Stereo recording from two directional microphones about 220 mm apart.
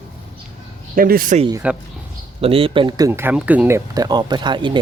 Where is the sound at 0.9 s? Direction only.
40° right (ahead or behind).